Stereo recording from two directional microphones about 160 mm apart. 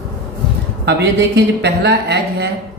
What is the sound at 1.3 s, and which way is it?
A woman's voice, 90° right.